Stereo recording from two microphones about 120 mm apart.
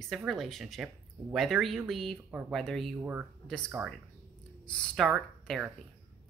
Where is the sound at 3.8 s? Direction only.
10° right (ahead or behind).